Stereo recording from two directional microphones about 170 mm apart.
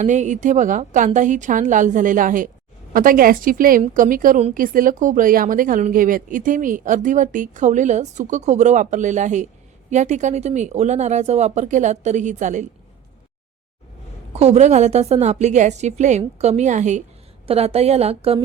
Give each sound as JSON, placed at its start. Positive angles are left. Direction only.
{"t": 0.0, "sound": "speech", "side_deg": -45}
{"t": 14.3, "sound": "a woman's voice", "side_deg": -40}